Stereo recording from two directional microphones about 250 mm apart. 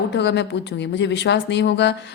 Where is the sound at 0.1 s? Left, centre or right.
Left.